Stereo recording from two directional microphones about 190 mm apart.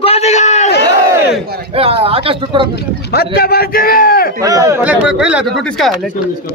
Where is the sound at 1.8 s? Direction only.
30° right (ahead or behind).